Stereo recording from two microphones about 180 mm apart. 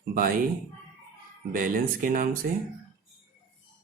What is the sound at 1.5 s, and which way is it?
Speech, 50° right (ahead or behind).